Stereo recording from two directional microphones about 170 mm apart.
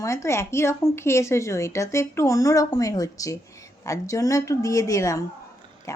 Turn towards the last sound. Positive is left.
turn(degrees=20)  # may be behind; listen again after turning